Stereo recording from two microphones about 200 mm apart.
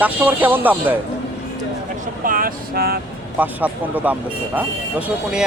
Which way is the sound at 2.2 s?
45° right (ahead or behind).